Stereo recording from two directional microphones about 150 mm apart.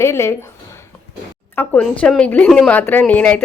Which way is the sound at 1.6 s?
10° left (ahead or behind).